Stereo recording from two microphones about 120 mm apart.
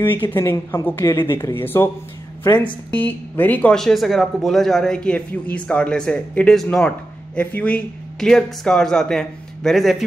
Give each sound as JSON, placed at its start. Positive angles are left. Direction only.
{"t": 0.0, "sound": "speech", "side_deg": 15}
{"t": 2.4, "sound": "a woman's voice", "side_deg": 40}
{"t": 2.9, "sound": "speech", "side_deg": 15}